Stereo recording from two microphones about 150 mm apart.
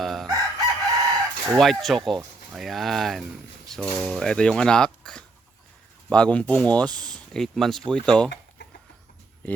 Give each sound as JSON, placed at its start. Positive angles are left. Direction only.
{"t": 0.0, "sound": "chicken", "side_deg": 0}
{"t": 0.9, "sound": "chicken", "side_deg": -25}
{"t": 1.5, "sound": "speech", "side_deg": 0}